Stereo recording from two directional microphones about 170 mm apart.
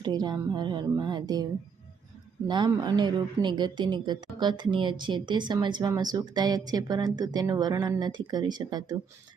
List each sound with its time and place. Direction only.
0.0 s speech: 25° right (ahead or behind)
2.5 s speech: 25° right (ahead or behind)